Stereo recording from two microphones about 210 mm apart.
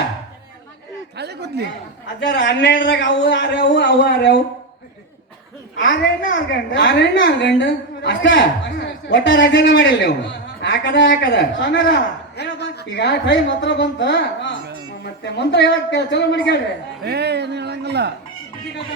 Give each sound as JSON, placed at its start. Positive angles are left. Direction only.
{"t": 1.1, "sound": "a sound", "side_deg": -50}
{"t": 2.3, "sound": "a woman's voice", "side_deg": 60}
{"t": 5.9, "sound": "a woman's voice", "side_deg": 45}
{"t": 17.0, "sound": "speech", "side_deg": -50}